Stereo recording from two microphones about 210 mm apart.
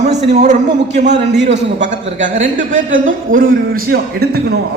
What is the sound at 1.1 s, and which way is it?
Speech, 55° right (ahead or behind).